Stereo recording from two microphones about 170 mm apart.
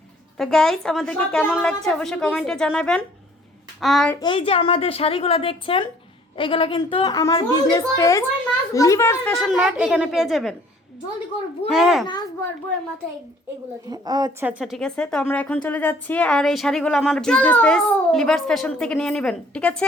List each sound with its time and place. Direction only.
0.3 s a woman's voice: centre (ahead or behind)
4.2 s a woman's voice: 30° left (ahead or behind)
9.4 s a woman's voice: centre (ahead or behind)
11.7 s a woman's voice: centre (ahead or behind)
13.9 s a woman's voice: 25° right (ahead or behind)
14.4 s a woman's voice: centre (ahead or behind)